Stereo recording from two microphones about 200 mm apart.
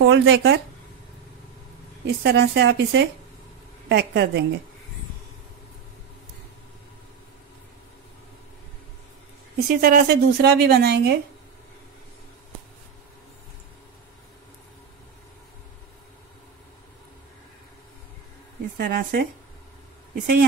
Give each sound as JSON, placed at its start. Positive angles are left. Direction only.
{"t": 0.0, "sound": "a woman's voice", "side_deg": -60}
{"t": 2.0, "sound": "a woman's voice", "side_deg": -55}
{"t": 9.7, "sound": "a woman's voice", "side_deg": -50}
{"t": 18.8, "sound": "a woman's voice", "side_deg": -50}